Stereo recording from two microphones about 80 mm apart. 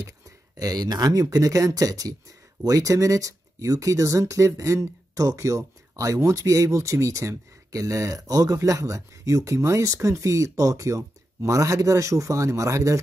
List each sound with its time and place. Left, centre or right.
0.6 s speech: right